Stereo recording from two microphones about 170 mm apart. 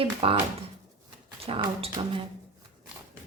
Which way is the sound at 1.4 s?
35° right (ahead or behind).